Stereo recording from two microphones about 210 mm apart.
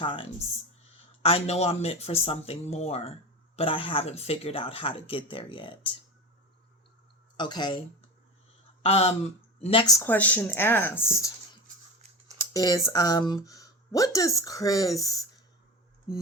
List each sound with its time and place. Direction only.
0.0 s speech: 25° left (ahead or behind)
7.3 s speech: 20° left (ahead or behind)
8.8 s speech: 30° left (ahead or behind); by 11.3 s 10° left (ahead or behind)
12.5 s speech: 15° left (ahead or behind)